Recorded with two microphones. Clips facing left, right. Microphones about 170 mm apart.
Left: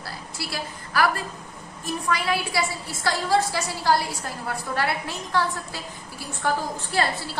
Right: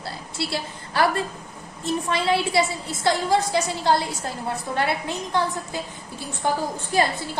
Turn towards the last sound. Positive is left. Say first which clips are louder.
# right 3 dB
turn(degrees=-15)  # may be behind; listen again after turning